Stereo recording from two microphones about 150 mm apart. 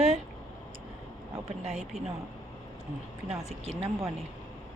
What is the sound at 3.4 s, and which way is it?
Speech, 45° right (ahead or behind).